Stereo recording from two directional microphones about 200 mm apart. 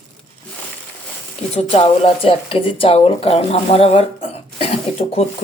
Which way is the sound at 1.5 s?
30° left (ahead or behind).